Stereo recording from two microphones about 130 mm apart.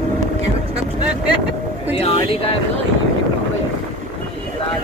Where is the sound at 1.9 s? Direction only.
45° left (ahead or behind).